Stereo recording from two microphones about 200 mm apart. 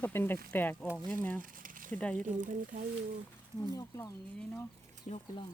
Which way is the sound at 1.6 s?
40° right (ahead or behind).